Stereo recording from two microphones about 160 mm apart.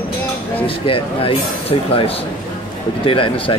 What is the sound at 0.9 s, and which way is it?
Speech, 35° left (ahead or behind).